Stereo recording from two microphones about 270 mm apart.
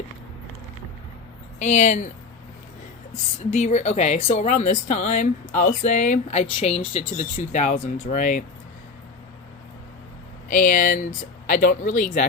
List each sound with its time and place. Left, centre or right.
1.5 s speech: left
3.5 s speech: left
10.5 s speech: left